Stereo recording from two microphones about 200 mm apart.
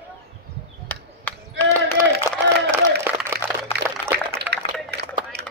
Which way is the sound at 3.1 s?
10° right (ahead or behind).